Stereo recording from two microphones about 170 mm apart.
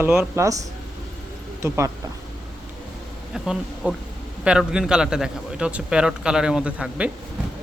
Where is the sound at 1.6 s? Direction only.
15° right (ahead or behind).